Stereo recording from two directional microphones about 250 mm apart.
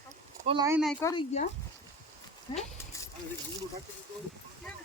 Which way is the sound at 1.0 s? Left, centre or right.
Centre.